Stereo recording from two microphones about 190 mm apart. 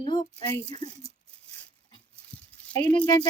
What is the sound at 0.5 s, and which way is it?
Speech, 20° left (ahead or behind).